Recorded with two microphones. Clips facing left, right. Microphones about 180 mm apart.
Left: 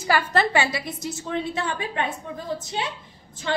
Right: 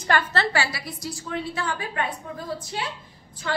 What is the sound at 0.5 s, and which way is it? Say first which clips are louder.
A woman's voice: left 3 dB; 20° left (ahead or behind).